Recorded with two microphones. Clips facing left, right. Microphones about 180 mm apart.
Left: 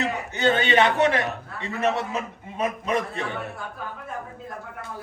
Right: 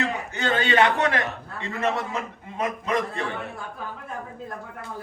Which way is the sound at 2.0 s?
20° left (ahead or behind).